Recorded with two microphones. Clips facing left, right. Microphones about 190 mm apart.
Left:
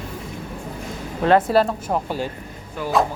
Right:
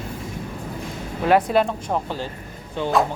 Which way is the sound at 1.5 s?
5° left (ahead or behind).